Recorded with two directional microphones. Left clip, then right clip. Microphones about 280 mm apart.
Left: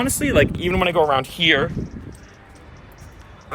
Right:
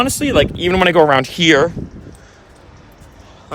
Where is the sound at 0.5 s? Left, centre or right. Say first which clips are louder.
Right 7 dB; right.